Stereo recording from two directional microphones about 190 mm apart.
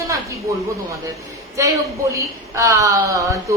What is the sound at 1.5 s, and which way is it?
A man's voice, 15° right (ahead or behind).